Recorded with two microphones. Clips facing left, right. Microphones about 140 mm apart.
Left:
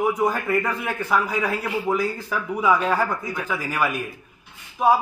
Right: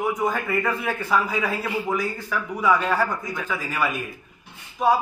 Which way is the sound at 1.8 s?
25° left (ahead or behind).